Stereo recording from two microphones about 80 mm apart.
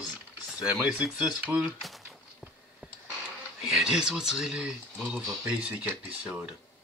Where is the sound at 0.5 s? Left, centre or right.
Centre.